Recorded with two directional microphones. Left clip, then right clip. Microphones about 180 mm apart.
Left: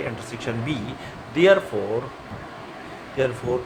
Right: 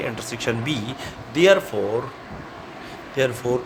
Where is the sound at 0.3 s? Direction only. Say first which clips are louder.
Right 4 dB; 55° right (ahead or behind).